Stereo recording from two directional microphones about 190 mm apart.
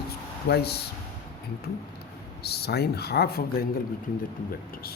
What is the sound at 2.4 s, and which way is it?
Speech, 55° left (ahead or behind).